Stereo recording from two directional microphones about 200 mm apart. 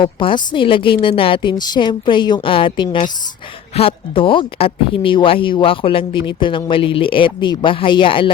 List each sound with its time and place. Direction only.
0.0 s speech: 25° left (ahead or behind)